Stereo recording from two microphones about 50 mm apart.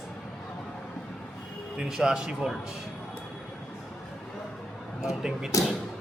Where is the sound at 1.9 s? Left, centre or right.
Centre.